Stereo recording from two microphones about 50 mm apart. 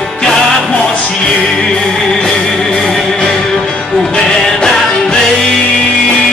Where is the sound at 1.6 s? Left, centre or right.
Centre.